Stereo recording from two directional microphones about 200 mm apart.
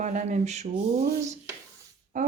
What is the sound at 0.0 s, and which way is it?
Speech, 40° right (ahead or behind).